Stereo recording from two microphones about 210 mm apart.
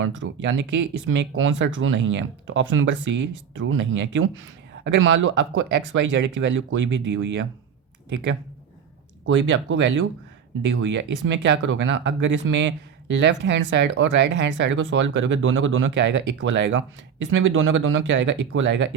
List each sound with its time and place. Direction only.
0.0 s speech: 60° right (ahead or behind)